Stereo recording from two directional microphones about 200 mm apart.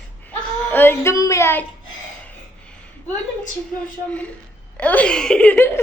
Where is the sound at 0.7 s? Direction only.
10° left (ahead or behind).